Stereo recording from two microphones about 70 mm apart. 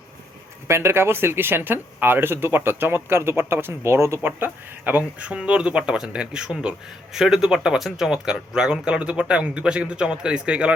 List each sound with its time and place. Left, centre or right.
0.7 s speech: right
4.3 s a man's voice: right